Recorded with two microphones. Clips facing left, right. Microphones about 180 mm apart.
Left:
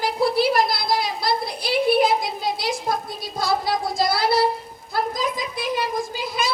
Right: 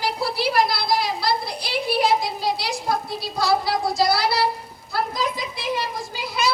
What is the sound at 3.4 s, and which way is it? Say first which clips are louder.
Child singing: right 1 dB; 50° left (ahead or behind).